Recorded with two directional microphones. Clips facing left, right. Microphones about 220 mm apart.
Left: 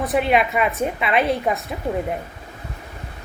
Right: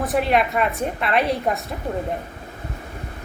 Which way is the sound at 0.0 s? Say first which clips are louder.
Left 1 dB; centre (ahead or behind).